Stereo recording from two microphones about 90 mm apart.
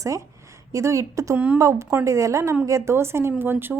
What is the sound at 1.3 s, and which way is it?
Speech, 15° right (ahead or behind).